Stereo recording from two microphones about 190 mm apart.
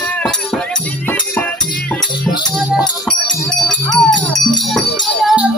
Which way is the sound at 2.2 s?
Centre (ahead or behind).